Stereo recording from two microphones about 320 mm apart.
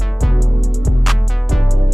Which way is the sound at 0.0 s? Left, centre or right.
Centre.